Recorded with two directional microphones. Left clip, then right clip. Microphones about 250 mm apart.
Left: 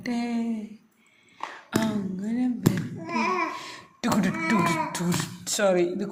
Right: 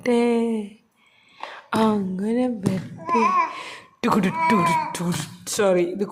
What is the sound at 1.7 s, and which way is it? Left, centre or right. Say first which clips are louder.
Speech: right 7 dB; right.